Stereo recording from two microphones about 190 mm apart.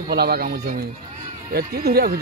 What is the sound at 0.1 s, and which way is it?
Speech, 55° right (ahead or behind).